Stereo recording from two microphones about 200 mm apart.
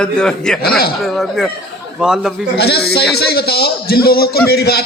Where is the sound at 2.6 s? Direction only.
55° left (ahead or behind).